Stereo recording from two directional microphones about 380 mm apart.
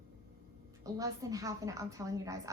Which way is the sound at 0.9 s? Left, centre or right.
Centre.